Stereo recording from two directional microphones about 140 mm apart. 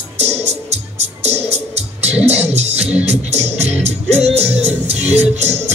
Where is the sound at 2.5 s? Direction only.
50° right (ahead or behind).